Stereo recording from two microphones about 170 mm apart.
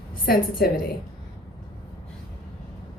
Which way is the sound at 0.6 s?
65° left (ahead or behind).